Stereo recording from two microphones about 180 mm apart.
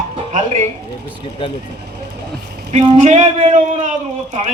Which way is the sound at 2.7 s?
40° right (ahead or behind).